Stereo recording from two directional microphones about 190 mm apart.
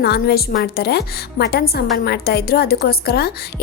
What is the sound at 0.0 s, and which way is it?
A woman's voice, 55° left (ahead or behind).